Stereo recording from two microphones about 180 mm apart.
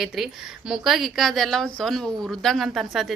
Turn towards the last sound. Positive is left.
turn(degrees=0)  # may be behind; listen again after turning